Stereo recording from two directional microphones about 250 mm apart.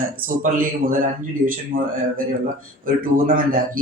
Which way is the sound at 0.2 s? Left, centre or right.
Right.